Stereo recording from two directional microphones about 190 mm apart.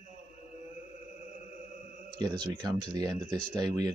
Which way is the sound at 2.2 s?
20° right (ahead or behind).